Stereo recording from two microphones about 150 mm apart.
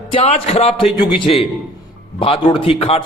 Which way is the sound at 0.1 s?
40° left (ahead or behind).